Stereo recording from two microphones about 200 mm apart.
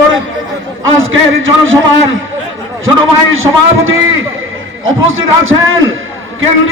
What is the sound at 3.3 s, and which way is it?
A man's voice, 85° right.